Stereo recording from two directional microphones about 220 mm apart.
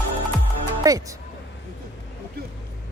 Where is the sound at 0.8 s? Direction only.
15° right (ahead or behind).